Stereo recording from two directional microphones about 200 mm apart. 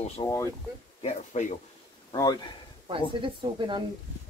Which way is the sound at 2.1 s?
20° left (ahead or behind).